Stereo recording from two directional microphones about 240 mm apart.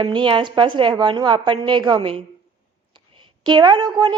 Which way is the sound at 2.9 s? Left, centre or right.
Centre.